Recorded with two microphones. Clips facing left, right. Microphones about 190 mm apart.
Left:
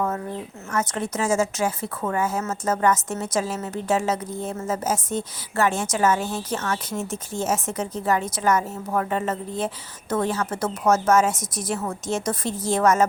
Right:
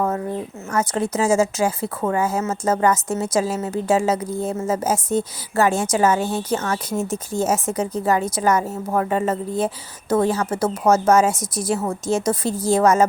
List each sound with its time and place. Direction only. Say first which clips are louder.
0.9 s a woman's voice: right 5 dB; 30° right (ahead or behind)